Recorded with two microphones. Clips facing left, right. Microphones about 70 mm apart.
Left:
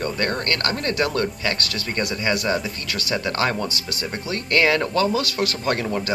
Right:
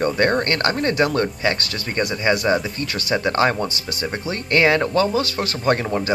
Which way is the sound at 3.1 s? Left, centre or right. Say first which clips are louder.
Right 4 dB; centre.